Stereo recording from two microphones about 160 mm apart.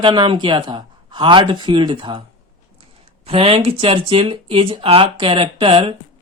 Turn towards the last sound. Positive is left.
turn(degrees=-35)  # may be behind; listen again after turning